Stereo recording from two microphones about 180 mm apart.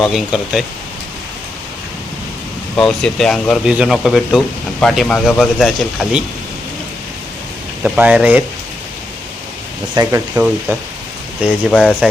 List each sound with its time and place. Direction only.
0.0 s speech: centre (ahead or behind)
2.7 s speech: 5° left (ahead or behind)
7.9 s speech: 5° right (ahead or behind)
9.9 s speech: 15° right (ahead or behind)
11.7 s speech: 5° left (ahead or behind)